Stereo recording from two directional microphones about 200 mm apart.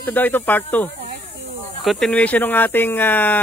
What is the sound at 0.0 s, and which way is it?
Speech, 10° left (ahead or behind).